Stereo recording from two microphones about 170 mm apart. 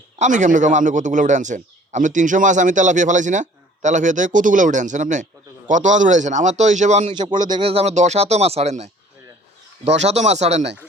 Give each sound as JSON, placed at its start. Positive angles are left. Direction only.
{"t": 0.2, "sound": "a man's voice", "side_deg": -45}
{"t": 7.1, "sound": "speech", "side_deg": -25}